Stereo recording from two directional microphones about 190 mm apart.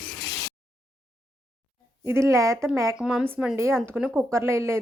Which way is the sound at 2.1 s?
15° right (ahead or behind).